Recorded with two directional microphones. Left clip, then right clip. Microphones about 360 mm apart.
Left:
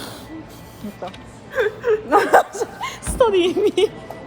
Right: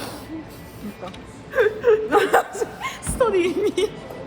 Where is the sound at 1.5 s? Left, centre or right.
Centre.